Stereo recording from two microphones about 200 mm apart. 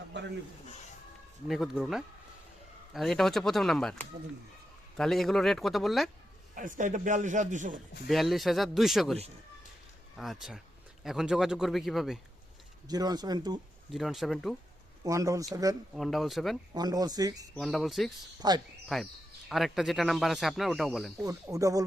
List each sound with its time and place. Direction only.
1.5 s speech: centre (ahead or behind)
6.5 s a man's voice: 40° right (ahead or behind)
8.0 s speech: centre (ahead or behind)
10.2 s speech: centre (ahead or behind)
12.9 s speech: 20° right (ahead or behind)
13.9 s speech: centre (ahead or behind)
15.0 s speech: 15° right (ahead or behind)
16.0 s speech: centre (ahead or behind)
16.7 s speech: 20° right (ahead or behind)
17.5 s speech: centre (ahead or behind)
18.3 s speech: 20° right (ahead or behind)
18.9 s speech: centre (ahead or behind)
21.2 s speech: 15° right (ahead or behind)